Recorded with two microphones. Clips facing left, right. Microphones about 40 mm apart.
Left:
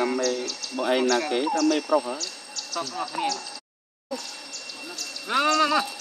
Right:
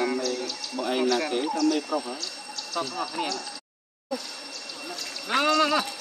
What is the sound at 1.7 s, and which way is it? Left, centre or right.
Speech, left.